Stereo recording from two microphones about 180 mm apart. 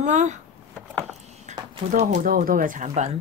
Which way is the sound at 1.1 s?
40° right (ahead or behind).